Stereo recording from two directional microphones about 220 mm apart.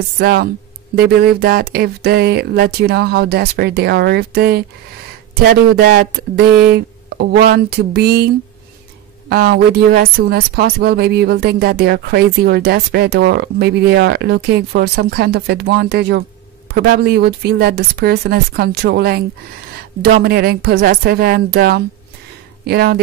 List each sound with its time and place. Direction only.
0.2 s speech: 45° right (ahead or behind)
9.3 s speech: 45° right (ahead or behind)